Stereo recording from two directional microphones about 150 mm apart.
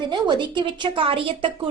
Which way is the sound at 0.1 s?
30° right (ahead or behind).